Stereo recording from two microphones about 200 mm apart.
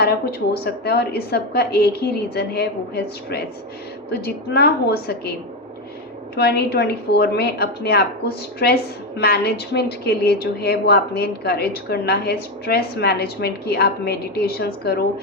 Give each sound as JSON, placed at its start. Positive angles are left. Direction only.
{"t": 0.0, "sound": "a woman's voice", "side_deg": 50}
{"t": 6.3, "sound": "a woman's voice", "side_deg": 55}